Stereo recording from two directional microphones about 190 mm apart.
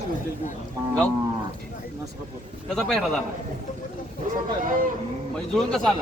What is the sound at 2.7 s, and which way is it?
Speech, centre (ahead or behind).